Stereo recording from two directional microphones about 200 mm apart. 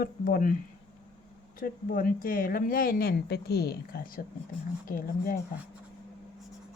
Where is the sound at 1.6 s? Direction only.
45° left (ahead or behind).